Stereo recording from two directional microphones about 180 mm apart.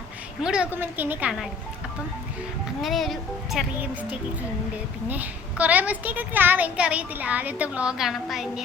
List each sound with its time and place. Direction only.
0.4 s a woman's voice: 5° right (ahead or behind)
2.8 s speech: centre (ahead or behind)
5.0 s a woman's voice: 10° right (ahead or behind)